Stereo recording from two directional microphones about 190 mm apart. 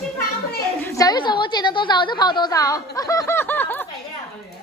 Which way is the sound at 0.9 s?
20° left (ahead or behind).